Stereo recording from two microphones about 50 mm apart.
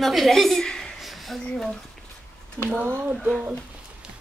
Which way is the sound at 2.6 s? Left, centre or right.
Centre.